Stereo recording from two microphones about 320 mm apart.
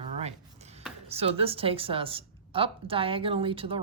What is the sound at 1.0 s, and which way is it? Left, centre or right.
A woman's voice, centre.